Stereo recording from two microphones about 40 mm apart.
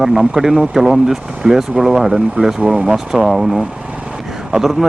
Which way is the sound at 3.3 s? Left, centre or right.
Centre.